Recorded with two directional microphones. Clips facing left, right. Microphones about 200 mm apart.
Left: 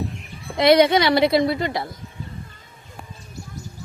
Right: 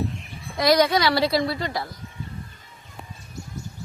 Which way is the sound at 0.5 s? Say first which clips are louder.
Left 4 dB; 25° left (ahead or behind).